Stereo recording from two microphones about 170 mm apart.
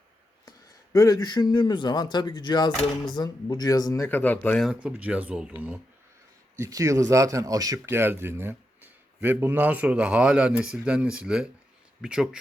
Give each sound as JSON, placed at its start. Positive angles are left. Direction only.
{"t": 0.9, "sound": "speech", "side_deg": 20}
{"t": 6.6, "sound": "a man's voice", "side_deg": -20}